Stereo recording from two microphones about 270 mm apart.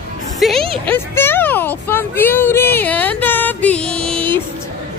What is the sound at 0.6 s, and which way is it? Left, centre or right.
Speech, right.